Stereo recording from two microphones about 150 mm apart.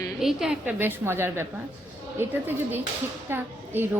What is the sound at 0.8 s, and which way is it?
A woman's voice, 15° right (ahead or behind).